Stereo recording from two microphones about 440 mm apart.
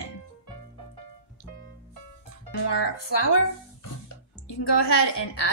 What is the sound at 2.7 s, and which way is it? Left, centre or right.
Speech, left.